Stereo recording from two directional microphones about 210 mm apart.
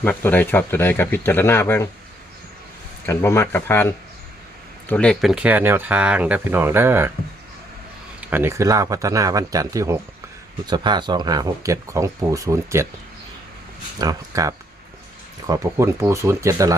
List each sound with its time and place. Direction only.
0.0 s speech: 10° left (ahead or behind)
3.1 s speech: 15° left (ahead or behind); by 7.1 s 10° right (ahead or behind)
8.2 s speech: 10° right (ahead or behind)
14.0 s speech: 15° right (ahead or behind)